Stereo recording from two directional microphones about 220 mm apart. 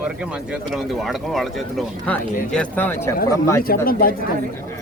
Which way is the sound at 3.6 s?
40° left (ahead or behind).